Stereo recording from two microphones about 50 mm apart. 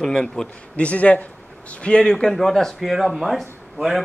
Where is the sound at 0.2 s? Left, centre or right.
Left.